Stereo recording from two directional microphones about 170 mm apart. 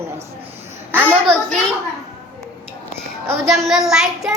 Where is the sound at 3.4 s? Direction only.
Centre (ahead or behind).